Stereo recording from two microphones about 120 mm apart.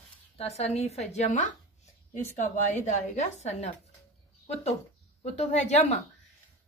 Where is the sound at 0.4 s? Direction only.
65° left (ahead or behind).